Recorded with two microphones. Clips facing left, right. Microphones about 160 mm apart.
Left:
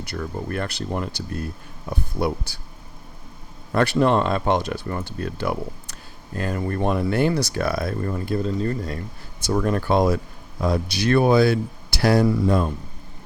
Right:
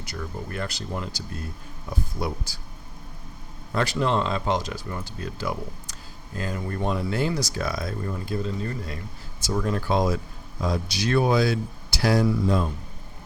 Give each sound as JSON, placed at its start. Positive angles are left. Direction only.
{"t": 0.0, "sound": "speech", "side_deg": 60}
{"t": 3.8, "sound": "speech", "side_deg": 55}